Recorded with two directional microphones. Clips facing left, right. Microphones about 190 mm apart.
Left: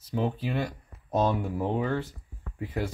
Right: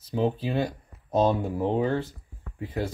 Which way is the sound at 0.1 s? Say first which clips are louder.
Right 3 dB; 30° right (ahead or behind).